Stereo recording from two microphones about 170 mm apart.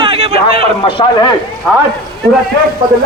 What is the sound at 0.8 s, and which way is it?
Speech, 30° left (ahead or behind).